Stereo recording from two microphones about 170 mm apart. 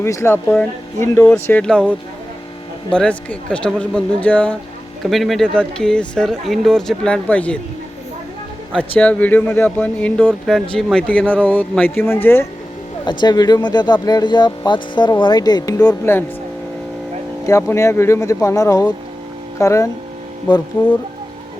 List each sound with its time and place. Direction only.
0.0 s speech: 15° left (ahead or behind)
9.0 s speech: 10° left (ahead or behind)
13.1 s speech: 25° left (ahead or behind)
17.4 s speech: 15° left (ahead or behind)